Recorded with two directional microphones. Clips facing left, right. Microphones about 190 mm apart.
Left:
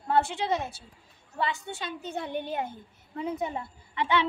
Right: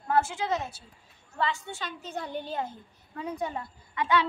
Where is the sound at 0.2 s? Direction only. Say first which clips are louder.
Left 1 dB; 30° left (ahead or behind).